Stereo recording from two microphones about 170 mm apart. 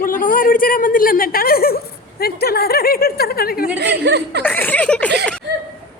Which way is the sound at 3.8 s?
85° right.